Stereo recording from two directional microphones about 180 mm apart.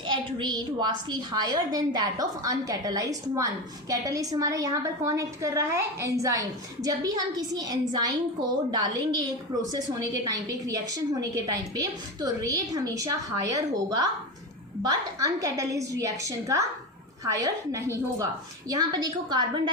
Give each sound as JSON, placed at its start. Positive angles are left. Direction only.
{"t": 0.0, "sound": "a woman's voice", "side_deg": -25}